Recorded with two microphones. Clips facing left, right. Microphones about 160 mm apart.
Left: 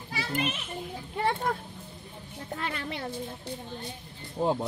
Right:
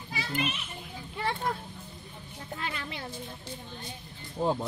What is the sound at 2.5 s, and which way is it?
Speech, 50° left (ahead or behind).